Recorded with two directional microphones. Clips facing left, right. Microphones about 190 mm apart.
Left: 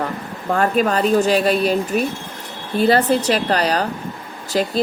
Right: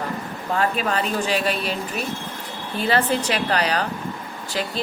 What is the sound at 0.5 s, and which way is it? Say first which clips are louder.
Speech: left 5 dB; 45° left (ahead or behind).